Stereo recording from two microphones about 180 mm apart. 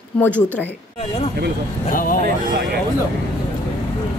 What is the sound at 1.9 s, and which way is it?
Speech, 50° left (ahead or behind).